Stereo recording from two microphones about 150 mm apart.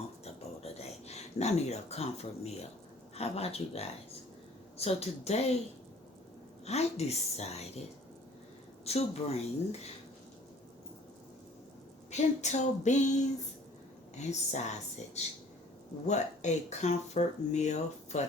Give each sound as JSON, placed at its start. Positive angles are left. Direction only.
{"t": 0.6, "sound": "a sound", "side_deg": 45}
{"t": 3.2, "sound": "speech", "side_deg": 45}
{"t": 6.7, "sound": "speech", "side_deg": 45}
{"t": 8.8, "sound": "speech", "side_deg": 45}
{"t": 12.1, "sound": "speech", "side_deg": 50}